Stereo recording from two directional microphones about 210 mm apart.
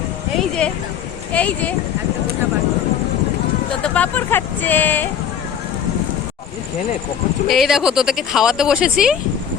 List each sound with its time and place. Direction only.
0.3 s music: 5° left (ahead or behind)
1.3 s speech: 5° left (ahead or behind)
3.8 s speech: 5° left (ahead or behind)
7.4 s speech: centre (ahead or behind)